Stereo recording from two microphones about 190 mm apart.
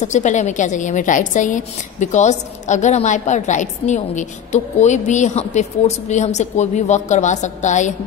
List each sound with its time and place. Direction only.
0.0 s a woman's voice: 40° left (ahead or behind)